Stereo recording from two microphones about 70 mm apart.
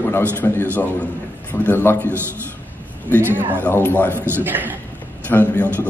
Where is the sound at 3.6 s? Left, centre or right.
Left.